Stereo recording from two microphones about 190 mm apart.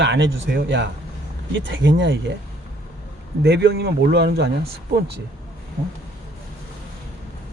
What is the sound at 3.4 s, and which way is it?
Speech, 60° right (ahead or behind).